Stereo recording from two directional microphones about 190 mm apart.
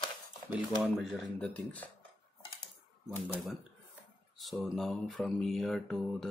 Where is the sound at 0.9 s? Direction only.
5° left (ahead or behind).